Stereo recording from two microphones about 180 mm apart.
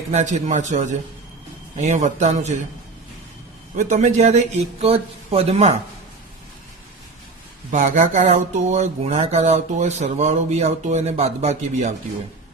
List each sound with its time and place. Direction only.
0.1 s speech: 40° right (ahead or behind)
3.8 s speech: 40° right (ahead or behind)
7.7 s speech: 40° right (ahead or behind)